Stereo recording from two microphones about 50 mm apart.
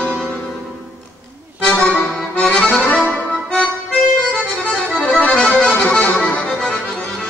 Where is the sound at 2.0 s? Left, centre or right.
Centre.